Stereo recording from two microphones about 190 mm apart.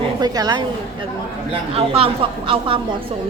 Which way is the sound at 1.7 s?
30° right (ahead or behind).